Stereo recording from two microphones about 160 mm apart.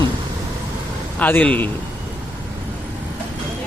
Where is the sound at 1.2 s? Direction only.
10° left (ahead or behind).